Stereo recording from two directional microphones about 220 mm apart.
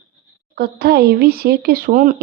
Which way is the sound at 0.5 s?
45° right (ahead or behind).